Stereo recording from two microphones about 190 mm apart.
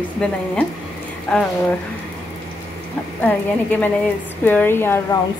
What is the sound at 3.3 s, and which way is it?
Speech, 10° left (ahead or behind).